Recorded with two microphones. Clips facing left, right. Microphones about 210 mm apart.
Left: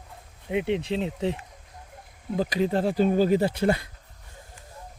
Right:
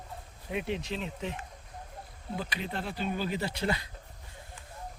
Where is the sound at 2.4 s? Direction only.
40° left (ahead or behind).